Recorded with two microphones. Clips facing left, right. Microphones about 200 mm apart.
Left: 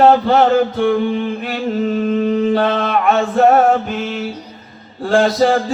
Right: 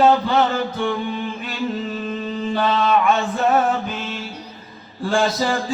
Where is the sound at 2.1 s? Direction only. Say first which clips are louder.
Left 11 dB; 60° left (ahead or behind).